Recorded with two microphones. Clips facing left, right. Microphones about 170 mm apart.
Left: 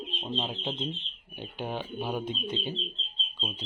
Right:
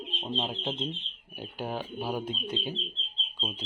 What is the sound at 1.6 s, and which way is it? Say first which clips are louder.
Speech: even; 5° right (ahead or behind).